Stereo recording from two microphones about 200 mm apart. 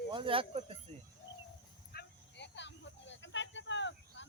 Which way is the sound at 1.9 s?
55° left (ahead or behind).